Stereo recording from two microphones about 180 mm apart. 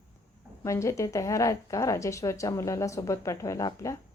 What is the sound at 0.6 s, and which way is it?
Speech, 15° left (ahead or behind).